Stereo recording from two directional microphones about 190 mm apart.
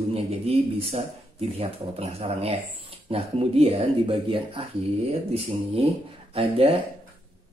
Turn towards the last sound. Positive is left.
turn(degrees=-30)  # may be behind; listen again after turning